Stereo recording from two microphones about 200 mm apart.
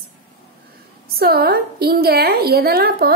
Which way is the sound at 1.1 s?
50° right (ahead or behind).